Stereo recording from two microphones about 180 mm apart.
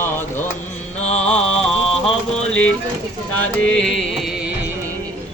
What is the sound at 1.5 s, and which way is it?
Music, 5° left (ahead or behind).